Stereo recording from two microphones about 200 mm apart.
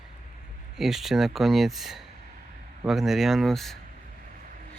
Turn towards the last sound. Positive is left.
turn(degrees=0)  # may be behind; listen again after turning